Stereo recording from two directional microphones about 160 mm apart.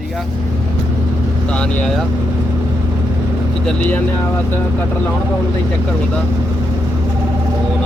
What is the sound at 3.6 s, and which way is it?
Speech, 10° left (ahead or behind).